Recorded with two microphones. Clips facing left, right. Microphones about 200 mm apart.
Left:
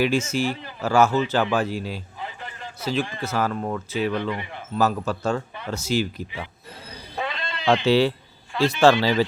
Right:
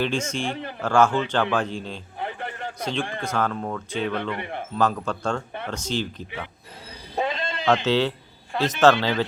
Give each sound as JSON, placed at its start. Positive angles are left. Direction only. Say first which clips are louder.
{"t": 0.0, "sound": "a man's voice", "louder": "left 4 dB", "side_deg": 5}
{"t": 2.1, "sound": "a sound", "louder": "right 4 dB", "side_deg": -60}
{"t": 2.8, "sound": "speech", "louder": "left 3 dB", "side_deg": 5}
{"t": 4.4, "sound": "a man's voice", "louder": "right 3 dB", "side_deg": -60}
{"t": 4.8, "sound": "a man's voice", "louder": "left 2 dB", "side_deg": 5}
{"t": 7.2, "sound": "sheep", "louder": "right 4 dB", "side_deg": -45}
{"t": 7.9, "sound": "a man's voice", "louder": "left 3 dB", "side_deg": 10}